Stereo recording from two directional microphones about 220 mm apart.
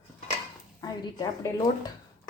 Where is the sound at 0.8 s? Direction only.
15° left (ahead or behind).